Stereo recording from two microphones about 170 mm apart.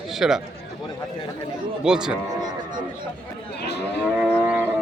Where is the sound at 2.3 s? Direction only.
25° right (ahead or behind).